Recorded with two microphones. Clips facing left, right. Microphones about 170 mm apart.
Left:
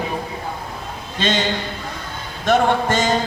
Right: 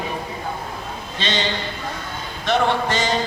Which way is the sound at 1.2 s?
50° left (ahead or behind).